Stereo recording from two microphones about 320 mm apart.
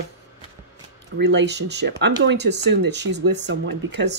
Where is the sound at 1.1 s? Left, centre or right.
Right.